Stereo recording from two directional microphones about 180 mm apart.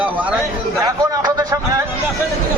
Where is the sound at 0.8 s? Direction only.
20° right (ahead or behind).